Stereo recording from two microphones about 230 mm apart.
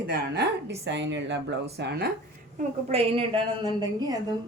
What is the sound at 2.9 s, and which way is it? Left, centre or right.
A woman's voice, right.